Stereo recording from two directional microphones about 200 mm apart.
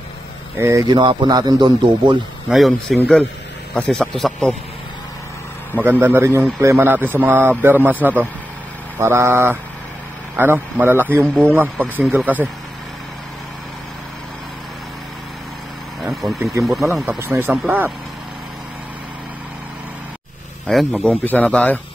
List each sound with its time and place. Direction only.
0.6 s a man's voice: 15° right (ahead or behind)
2.5 s a man's voice: centre (ahead or behind)
5.8 s a man's voice: 10° right (ahead or behind)
16.0 s a sound: centre (ahead or behind)
16.6 s a man's voice: centre (ahead or behind)
20.6 s speech: 5° left (ahead or behind)